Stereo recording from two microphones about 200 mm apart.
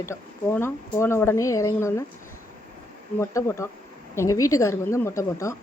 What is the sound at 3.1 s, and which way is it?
A woman's voice, 15° left (ahead or behind).